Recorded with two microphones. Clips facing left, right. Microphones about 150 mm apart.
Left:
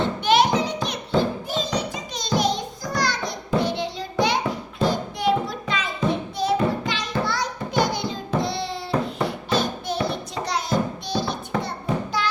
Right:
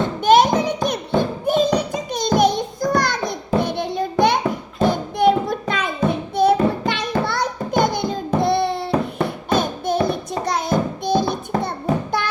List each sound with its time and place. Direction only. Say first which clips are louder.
0.2 s a sound: right 6 dB; 45° right (ahead or behind)
1.5 s music: right 8 dB; 55° right (ahead or behind)
4.8 s child singing: right 6 dB; 55° right (ahead or behind)
6.3 s music: right 6 dB; 60° right (ahead or behind)